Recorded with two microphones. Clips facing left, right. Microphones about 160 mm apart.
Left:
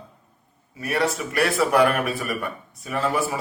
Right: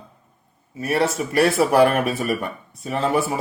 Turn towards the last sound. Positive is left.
turn(degrees=-25)  # may be behind; listen again after turning